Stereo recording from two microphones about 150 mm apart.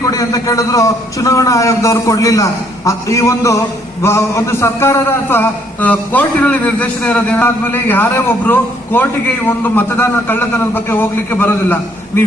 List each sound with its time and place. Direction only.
0.0 s a man's voice: 25° left (ahead or behind)